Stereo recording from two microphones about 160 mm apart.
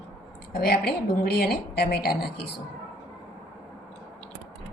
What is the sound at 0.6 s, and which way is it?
A woman's voice, 80° left.